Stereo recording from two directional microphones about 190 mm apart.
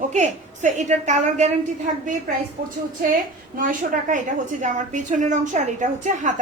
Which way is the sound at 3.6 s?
45° right (ahead or behind).